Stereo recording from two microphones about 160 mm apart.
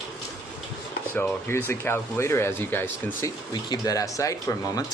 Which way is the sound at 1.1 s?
15° left (ahead or behind).